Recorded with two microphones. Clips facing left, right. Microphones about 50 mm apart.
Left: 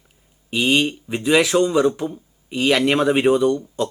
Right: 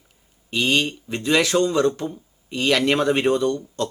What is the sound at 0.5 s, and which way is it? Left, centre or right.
Speech, centre.